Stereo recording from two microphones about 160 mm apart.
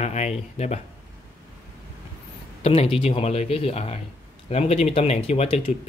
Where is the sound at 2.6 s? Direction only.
35° left (ahead or behind).